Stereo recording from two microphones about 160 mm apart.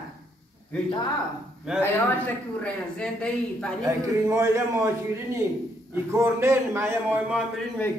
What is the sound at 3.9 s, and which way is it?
A man's voice, 20° right (ahead or behind).